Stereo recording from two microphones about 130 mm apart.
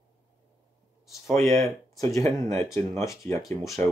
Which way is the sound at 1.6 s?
25° left (ahead or behind).